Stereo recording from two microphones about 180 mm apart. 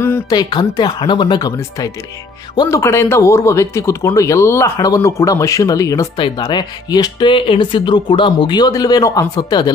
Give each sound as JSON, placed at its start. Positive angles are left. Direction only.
{"t": 0.0, "sound": "speech", "side_deg": 20}